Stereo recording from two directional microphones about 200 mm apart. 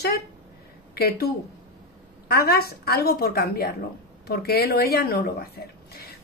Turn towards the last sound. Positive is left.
turn(degrees=50)  # may be behind; listen again after turning